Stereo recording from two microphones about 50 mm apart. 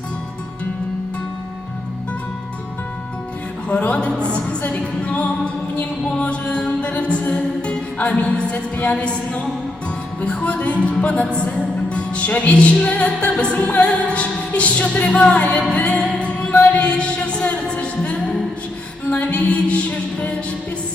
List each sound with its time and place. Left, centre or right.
3.7 s music: left